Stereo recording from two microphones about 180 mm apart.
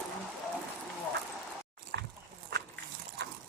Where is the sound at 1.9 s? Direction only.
75° right (ahead or behind).